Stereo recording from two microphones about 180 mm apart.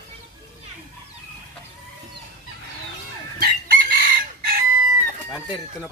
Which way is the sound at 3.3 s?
55° right (ahead or behind).